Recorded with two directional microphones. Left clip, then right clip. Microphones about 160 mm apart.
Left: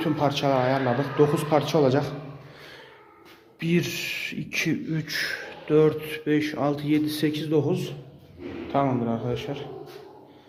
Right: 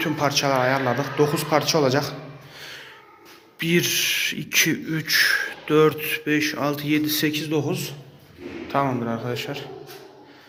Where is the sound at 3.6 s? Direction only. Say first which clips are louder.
Right 6 dB; 10° left (ahead or behind).